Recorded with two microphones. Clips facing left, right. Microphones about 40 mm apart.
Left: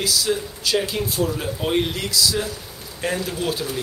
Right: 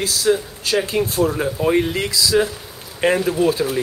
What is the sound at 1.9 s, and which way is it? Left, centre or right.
Speech, right.